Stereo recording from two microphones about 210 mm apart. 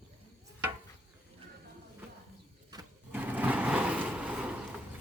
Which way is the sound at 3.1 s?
10° right (ahead or behind).